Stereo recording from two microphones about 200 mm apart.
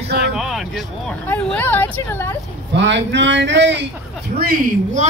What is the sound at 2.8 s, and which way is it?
Speech, 65° right (ahead or behind).